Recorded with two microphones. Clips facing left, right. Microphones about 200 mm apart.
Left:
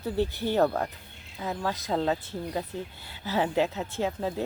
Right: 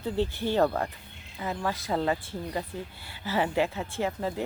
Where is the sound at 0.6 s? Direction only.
Centre (ahead or behind).